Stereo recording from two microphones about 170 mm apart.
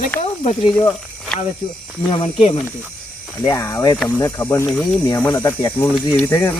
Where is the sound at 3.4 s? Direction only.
20° left (ahead or behind).